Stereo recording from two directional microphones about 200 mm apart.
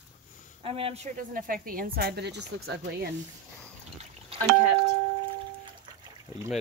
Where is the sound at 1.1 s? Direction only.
45° right (ahead or behind).